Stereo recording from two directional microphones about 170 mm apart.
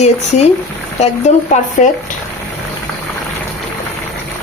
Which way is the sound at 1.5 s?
45° left (ahead or behind).